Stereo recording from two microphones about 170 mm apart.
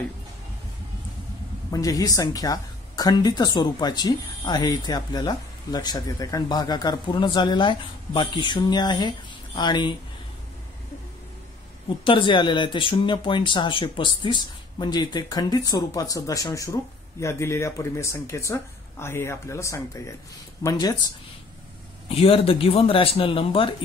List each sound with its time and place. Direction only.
1.7 s speech: 20° left (ahead or behind)
12.0 s speech: 30° left (ahead or behind)
22.1 s speech: 35° left (ahead or behind)